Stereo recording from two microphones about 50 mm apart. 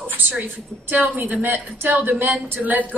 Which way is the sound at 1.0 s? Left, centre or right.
Right.